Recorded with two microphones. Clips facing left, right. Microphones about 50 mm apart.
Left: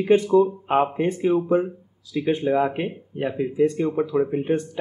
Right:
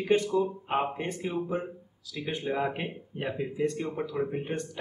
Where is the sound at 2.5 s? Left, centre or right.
Centre.